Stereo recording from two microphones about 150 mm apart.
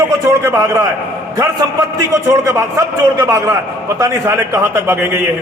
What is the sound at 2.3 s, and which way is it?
A man's voice, 20° right (ahead or behind).